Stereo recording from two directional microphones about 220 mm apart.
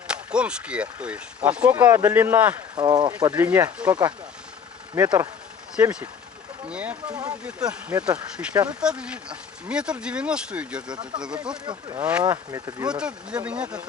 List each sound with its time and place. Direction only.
0.1 s speech: 5° right (ahead or behind)
4.9 s speech: 10° right (ahead or behind)
11.6 s speech: 20° right (ahead or behind)
12.9 s speech: 5° right (ahead or behind)